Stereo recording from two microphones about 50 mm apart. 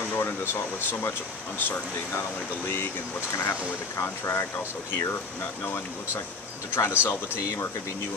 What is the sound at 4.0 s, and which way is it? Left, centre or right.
Speech, left.